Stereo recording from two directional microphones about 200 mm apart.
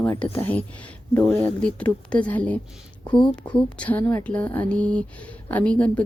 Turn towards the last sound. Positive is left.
turn(degrees=5)  # may be behind; listen again after turning